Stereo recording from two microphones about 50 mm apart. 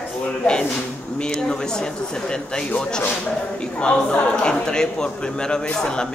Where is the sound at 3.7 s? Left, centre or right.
Left.